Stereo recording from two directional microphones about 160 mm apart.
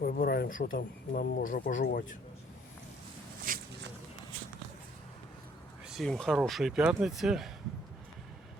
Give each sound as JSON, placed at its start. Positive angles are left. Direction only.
{"t": 0.0, "sound": "speech", "side_deg": 65}
{"t": 3.5, "sound": "a sound", "side_deg": -60}
{"t": 5.9, "sound": "speech", "side_deg": 0}